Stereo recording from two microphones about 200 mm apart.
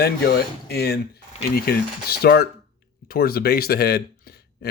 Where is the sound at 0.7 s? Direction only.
55° left (ahead or behind).